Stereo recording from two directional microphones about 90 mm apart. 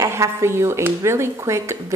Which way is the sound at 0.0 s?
35° right (ahead or behind).